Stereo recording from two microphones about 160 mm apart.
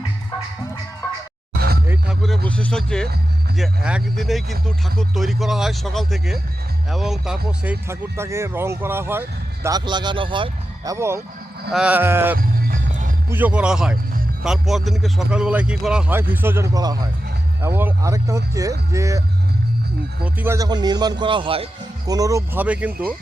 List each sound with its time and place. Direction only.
1.9 s speech: centre (ahead or behind)
7.6 s speech: 10° right (ahead or behind)
9.6 s speech: 25° right (ahead or behind)
10.9 s speech: 15° right (ahead or behind)
12.4 s music: 65° right (ahead or behind)
13.3 s speech: 10° right (ahead or behind)
20.2 s speech: 15° right (ahead or behind); by 21.7 s 35° right (ahead or behind)
22.0 s speech: 20° right (ahead or behind)
22.6 s speech: 10° right (ahead or behind)